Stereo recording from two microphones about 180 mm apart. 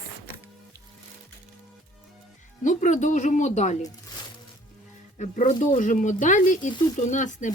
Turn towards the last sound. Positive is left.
turn(degrees=45)  # may be behind; listen again after turning